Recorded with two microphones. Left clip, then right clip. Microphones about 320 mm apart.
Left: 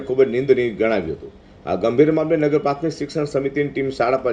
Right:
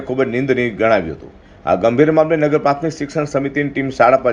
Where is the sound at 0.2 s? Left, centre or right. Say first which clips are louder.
Left 1 dB; centre.